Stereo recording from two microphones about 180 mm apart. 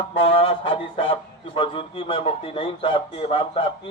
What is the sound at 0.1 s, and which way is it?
A man's voice, 30° left (ahead or behind).